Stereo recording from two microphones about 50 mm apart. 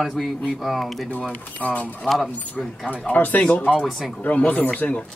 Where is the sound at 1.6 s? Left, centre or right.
Left.